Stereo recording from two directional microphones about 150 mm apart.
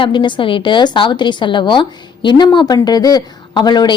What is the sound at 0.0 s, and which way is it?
A woman's voice, 30° left (ahead or behind).